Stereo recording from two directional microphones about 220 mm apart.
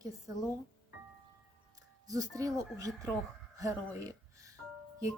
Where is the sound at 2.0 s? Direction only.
15° right (ahead or behind).